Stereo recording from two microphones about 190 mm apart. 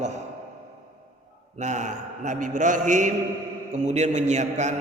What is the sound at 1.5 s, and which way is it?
A man's voice, 40° right (ahead or behind).